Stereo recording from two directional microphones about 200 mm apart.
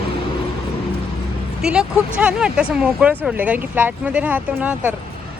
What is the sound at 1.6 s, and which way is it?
A woman's voice, 5° right (ahead or behind).